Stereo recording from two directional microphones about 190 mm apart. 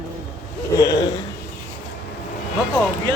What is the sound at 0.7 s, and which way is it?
Speech, 15° left (ahead or behind).